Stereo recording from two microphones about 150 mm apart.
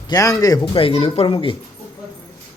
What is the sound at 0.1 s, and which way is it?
Speech, 20° left (ahead or behind).